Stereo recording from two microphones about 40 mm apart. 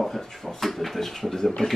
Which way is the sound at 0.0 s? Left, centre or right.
Centre.